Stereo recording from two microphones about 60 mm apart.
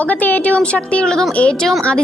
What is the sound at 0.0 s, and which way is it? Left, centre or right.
A woman's voice, left.